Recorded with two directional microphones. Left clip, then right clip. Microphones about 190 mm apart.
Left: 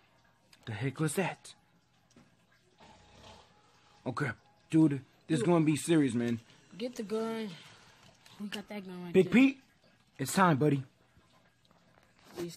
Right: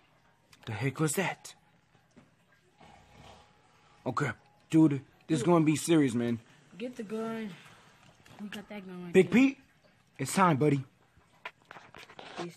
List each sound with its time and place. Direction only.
0.5 s speech: 5° right (ahead or behind)
4.0 s speech: 5° right (ahead or behind)
6.8 s speech: 45° left (ahead or behind)
8.5 s speech: 40° left (ahead or behind)
9.1 s speech: 5° right (ahead or behind)